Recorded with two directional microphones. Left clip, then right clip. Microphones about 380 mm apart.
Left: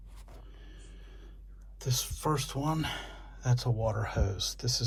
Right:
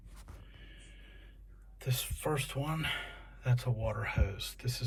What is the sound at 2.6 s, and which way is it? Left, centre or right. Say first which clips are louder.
Speech: left 2 dB; centre.